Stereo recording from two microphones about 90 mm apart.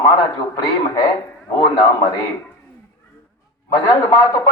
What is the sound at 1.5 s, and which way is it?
Speech, 50° left (ahead or behind).